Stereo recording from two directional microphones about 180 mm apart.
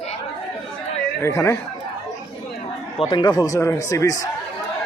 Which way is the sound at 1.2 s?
15° left (ahead or behind).